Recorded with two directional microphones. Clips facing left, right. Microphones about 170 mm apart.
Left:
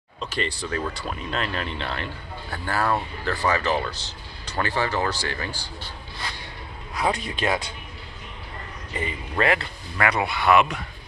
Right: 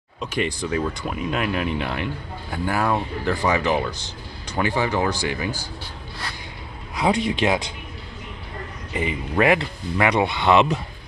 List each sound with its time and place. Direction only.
0.2 s speech: 15° right (ahead or behind)
7.2 s speech: 15° right (ahead or behind)
8.9 s speech: 15° right (ahead or behind)